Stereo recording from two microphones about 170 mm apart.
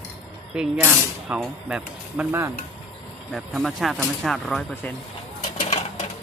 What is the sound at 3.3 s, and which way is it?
Speech, centre (ahead or behind).